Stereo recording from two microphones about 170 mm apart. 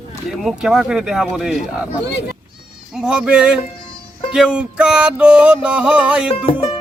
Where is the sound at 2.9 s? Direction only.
5° right (ahead or behind).